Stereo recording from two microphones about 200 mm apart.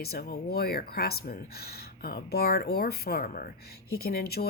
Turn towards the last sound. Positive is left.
turn(degrees=50)  # may be behind; listen again after turning